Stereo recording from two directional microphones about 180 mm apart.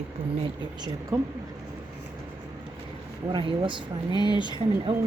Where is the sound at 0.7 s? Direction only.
25° right (ahead or behind).